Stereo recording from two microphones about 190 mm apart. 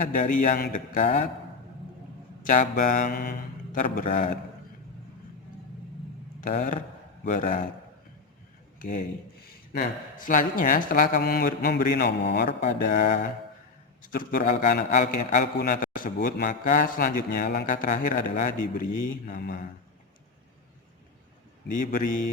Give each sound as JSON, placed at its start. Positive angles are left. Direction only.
{"t": 0.0, "sound": "speech", "side_deg": 45}
{"t": 2.4, "sound": "speech", "side_deg": 45}
{"t": 6.4, "sound": "speech", "side_deg": 45}
{"t": 8.8, "sound": "speech", "side_deg": 45}
{"t": 12.8, "sound": "speech", "side_deg": 50}
{"t": 21.7, "sound": "speech", "side_deg": 45}